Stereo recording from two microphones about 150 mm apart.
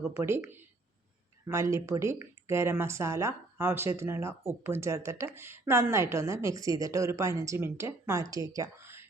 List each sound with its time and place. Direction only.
0.2 s speech: 15° right (ahead or behind)